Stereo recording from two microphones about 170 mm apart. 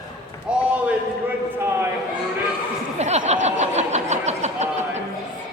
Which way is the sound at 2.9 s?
40° right (ahead or behind).